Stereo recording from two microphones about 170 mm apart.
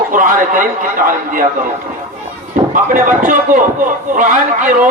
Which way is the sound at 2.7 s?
50° right (ahead or behind).